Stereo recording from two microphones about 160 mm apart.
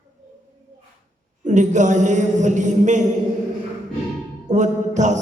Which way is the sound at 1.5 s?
50° right (ahead or behind).